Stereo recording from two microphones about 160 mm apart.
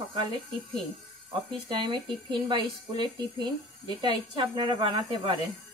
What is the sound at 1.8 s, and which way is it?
A woman's voice, 30° right (ahead or behind).